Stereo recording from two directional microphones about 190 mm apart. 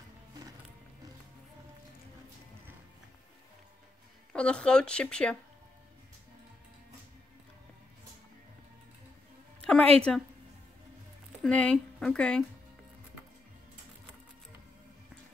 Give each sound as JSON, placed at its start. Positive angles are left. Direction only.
{"t": 4.3, "sound": "a woman's voice", "side_deg": 5}
{"t": 9.9, "sound": "a woman's voice", "side_deg": 5}
{"t": 11.4, "sound": "a woman's voice", "side_deg": 5}